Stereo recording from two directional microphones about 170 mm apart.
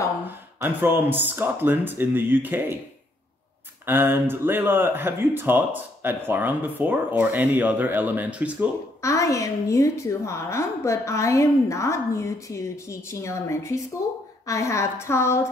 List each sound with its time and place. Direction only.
0.6 s speech: 10° right (ahead or behind)
3.8 s speech: 10° right (ahead or behind)
9.0 s a woman's voice: 20° left (ahead or behind)